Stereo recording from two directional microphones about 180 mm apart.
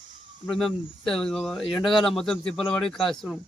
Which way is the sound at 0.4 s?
Centre (ahead or behind).